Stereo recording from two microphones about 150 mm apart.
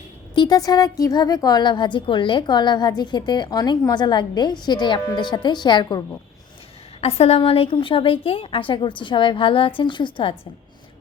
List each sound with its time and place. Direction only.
0.3 s speech: 25° left (ahead or behind)
7.0 s a woman's voice: 45° left (ahead or behind)